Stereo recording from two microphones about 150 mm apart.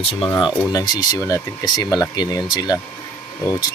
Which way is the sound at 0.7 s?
25° left (ahead or behind).